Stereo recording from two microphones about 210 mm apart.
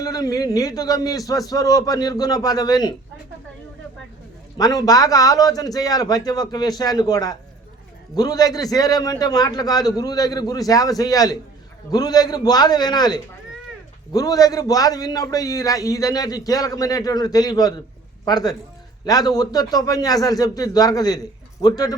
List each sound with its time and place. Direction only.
0.0 s a man's voice: 15° left (ahead or behind)
4.5 s a man's voice: 15° left (ahead or behind)